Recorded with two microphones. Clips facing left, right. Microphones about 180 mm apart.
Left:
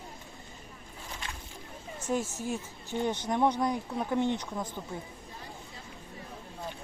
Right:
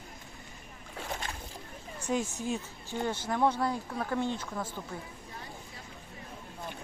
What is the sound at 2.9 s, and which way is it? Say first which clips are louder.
A woman's voice: left 2 dB; 20° left (ahead or behind).